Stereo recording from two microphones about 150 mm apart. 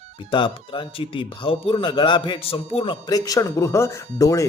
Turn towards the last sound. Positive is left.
turn(degrees=20)  # may be behind; listen again after turning